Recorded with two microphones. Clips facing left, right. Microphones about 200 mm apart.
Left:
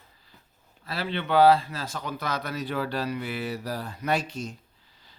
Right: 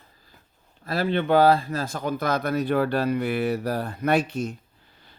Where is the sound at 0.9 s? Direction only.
50° right (ahead or behind).